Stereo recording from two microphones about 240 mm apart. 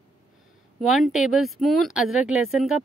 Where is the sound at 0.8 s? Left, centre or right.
Centre.